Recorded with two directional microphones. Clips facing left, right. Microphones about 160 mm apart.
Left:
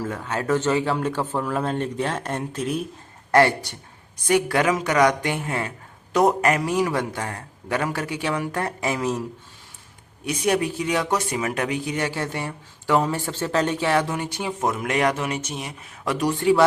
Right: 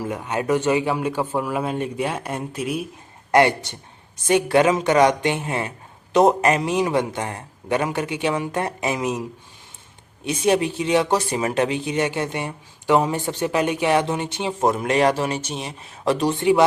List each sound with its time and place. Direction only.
0.0 s a man's voice: 15° right (ahead or behind)
3.3 s speech: 20° right (ahead or behind)
10.2 s speech: 25° right (ahead or behind)